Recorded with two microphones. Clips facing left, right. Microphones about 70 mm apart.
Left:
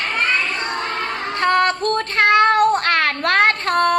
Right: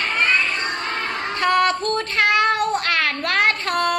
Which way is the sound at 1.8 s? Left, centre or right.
Left.